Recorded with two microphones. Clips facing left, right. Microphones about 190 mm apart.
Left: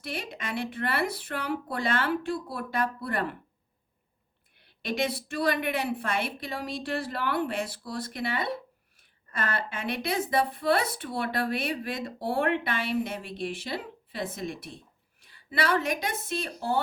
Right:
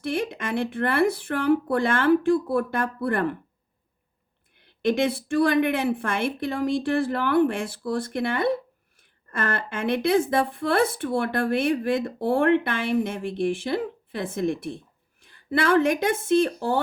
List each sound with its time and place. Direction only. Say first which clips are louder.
0.1 s speech: right 8 dB; 50° right (ahead or behind)
4.9 s a woman's voice: right 7 dB; 50° right (ahead or behind)